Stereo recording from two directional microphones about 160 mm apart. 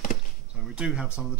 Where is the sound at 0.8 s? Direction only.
5° right (ahead or behind).